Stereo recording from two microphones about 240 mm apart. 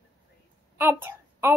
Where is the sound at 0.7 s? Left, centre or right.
Centre.